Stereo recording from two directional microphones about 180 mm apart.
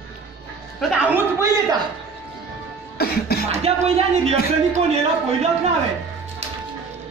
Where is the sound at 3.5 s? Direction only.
35° right (ahead or behind).